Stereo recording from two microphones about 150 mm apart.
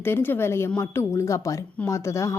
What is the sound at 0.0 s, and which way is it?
A woman's voice, 15° left (ahead or behind).